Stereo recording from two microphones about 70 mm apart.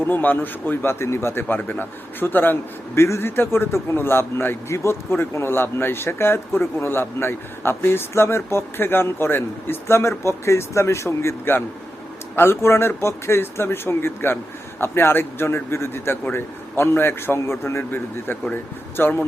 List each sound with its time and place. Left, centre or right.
0.0 s speech: left